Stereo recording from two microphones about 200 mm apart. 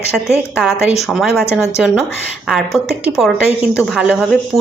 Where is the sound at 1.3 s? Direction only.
10° left (ahead or behind).